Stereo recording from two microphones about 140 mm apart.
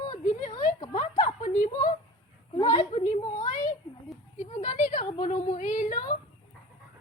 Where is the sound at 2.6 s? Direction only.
50° left (ahead or behind); by 6.0 s 65° left (ahead or behind).